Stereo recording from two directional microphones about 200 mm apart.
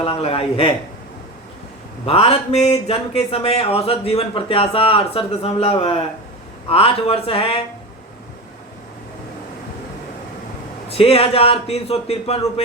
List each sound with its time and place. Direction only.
0.0 s speech: 30° left (ahead or behind)
2.0 s speech: 30° left (ahead or behind)
10.8 s speech: 30° left (ahead or behind)